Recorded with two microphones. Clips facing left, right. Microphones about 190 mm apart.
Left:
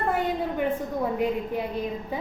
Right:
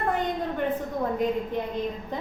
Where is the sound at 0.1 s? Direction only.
10° left (ahead or behind).